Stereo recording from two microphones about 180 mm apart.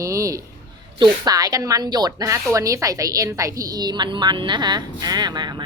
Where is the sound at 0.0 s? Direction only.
15° right (ahead or behind).